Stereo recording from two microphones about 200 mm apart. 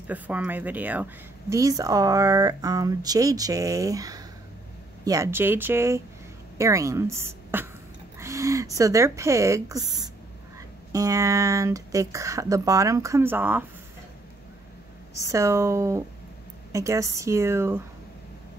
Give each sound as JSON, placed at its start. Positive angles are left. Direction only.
{"t": 0.0, "sound": "speech", "side_deg": -10}
{"t": 15.1, "sound": "speech", "side_deg": -15}